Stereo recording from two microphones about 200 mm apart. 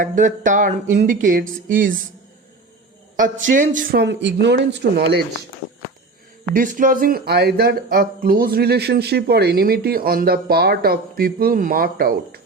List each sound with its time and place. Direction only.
0.0 s speech: 40° right (ahead or behind)
3.2 s speech: 40° right (ahead or behind)
4.0 s speech: 60° right (ahead or behind)
6.5 s speech: 40° right (ahead or behind)